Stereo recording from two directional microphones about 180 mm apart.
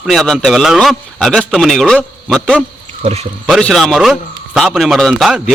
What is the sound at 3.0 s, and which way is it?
Speech, 35° right (ahead or behind).